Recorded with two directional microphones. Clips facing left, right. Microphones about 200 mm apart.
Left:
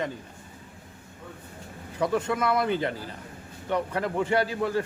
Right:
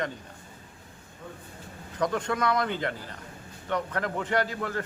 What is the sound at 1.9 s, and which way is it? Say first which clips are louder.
Speech: left 2 dB; 5° left (ahead or behind).